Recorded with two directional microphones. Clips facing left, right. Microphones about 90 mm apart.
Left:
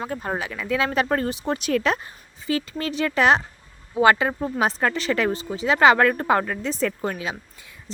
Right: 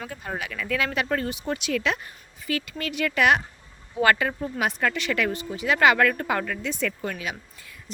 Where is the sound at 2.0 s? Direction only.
25° left (ahead or behind).